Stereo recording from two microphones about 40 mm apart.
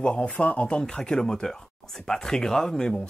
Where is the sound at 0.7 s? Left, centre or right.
Centre.